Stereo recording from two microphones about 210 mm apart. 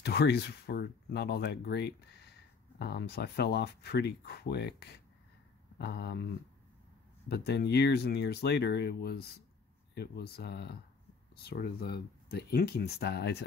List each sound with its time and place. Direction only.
0.0 s speech: 50° left (ahead or behind)